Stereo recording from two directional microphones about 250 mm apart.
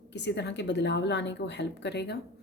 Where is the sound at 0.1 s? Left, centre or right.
Left.